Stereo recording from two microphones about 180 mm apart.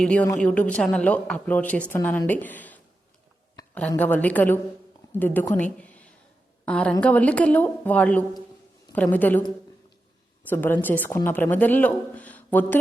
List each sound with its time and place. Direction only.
0.0 s speech: 5° left (ahead or behind)
5.8 s a sound: 10° left (ahead or behind)
6.7 s a woman's voice: 5° left (ahead or behind)
10.5 s speech: 10° left (ahead or behind)